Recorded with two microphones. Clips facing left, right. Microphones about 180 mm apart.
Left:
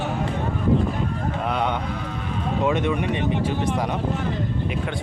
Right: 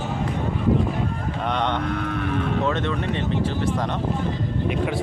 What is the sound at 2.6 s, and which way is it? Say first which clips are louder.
Speech: left 2 dB; 15° left (ahead or behind).